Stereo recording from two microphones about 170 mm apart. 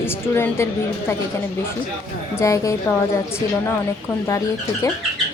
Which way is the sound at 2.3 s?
20° left (ahead or behind).